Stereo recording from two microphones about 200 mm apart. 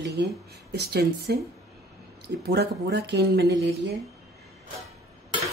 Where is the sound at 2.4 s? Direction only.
55° right (ahead or behind).